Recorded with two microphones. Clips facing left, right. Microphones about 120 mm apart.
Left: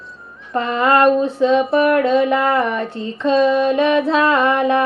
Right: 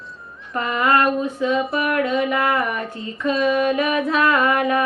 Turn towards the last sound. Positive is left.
turn(degrees=30)  # may be behind; listen again after turning